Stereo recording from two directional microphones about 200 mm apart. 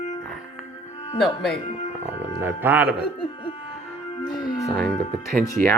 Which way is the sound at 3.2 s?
25° left (ahead or behind).